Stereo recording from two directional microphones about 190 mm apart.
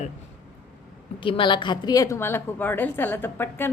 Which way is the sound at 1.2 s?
25° left (ahead or behind).